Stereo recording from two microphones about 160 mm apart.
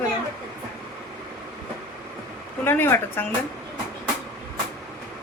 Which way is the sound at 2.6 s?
15° left (ahead or behind).